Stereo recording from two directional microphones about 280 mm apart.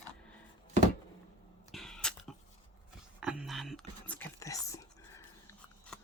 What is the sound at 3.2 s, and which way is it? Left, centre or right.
Whispering, centre.